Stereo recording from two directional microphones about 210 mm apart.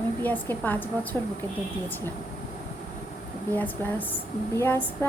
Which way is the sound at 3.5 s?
10° left (ahead or behind).